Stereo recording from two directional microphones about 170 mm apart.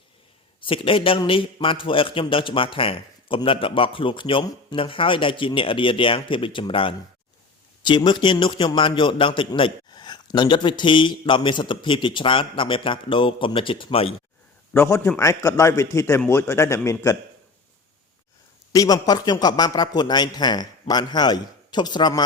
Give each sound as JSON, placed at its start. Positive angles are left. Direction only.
{"t": 0.6, "sound": "a man's voice", "side_deg": 30}
{"t": 14.7, "sound": "a man's voice", "side_deg": 15}
{"t": 18.7, "sound": "a man's voice", "side_deg": 20}